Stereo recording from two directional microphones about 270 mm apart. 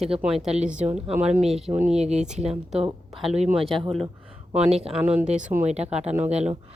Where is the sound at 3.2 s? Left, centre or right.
Right.